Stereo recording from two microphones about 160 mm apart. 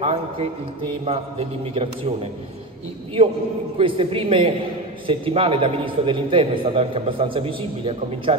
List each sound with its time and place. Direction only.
0.0 s a man's voice: 40° right (ahead or behind)
3.7 s a man's voice: 35° right (ahead or behind)